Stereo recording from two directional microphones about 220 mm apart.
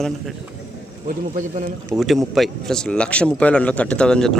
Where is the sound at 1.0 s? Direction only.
35° right (ahead or behind).